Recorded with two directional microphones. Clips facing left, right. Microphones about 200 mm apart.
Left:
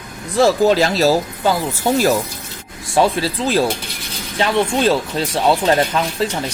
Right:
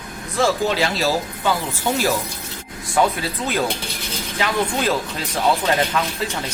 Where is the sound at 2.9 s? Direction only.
30° left (ahead or behind).